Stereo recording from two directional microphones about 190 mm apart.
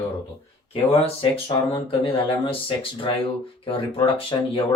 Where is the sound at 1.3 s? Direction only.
30° left (ahead or behind).